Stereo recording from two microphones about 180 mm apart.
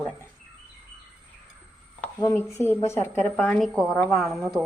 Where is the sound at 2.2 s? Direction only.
15° left (ahead or behind).